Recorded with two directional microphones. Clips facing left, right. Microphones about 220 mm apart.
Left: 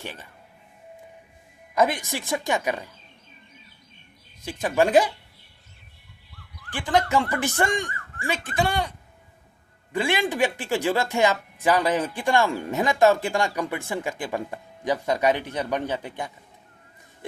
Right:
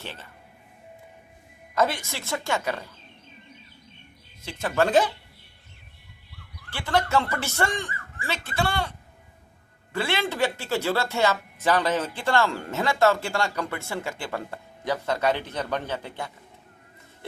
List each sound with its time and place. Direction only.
0.0 s speech: 15° left (ahead or behind)
1.7 s speech: 15° left (ahead or behind)
4.4 s speech: 15° left (ahead or behind)
6.7 s speech: 15° left (ahead or behind)
9.9 s speech: 15° left (ahead or behind)